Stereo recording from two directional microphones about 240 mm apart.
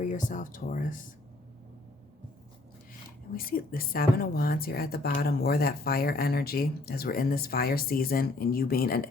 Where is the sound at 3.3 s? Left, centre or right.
Left.